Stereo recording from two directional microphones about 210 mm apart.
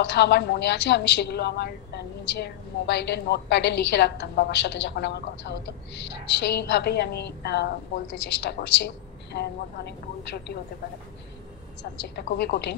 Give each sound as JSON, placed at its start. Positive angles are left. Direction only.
{"t": 0.0, "sound": "a woman's voice", "side_deg": 55}
{"t": 12.0, "sound": "a woman's voice", "side_deg": 50}